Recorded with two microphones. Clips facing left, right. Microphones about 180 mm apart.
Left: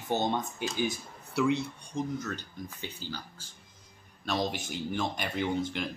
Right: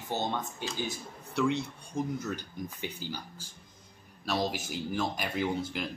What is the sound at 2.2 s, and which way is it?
Speech, 15° right (ahead or behind).